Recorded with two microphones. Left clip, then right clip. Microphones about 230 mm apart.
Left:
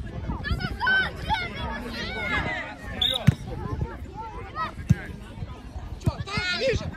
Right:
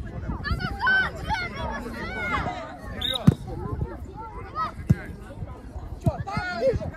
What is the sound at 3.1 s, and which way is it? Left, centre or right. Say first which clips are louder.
Basketball bounce: right 2 dB; left.